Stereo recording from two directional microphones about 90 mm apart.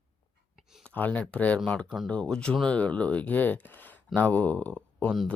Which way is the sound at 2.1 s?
10° left (ahead or behind).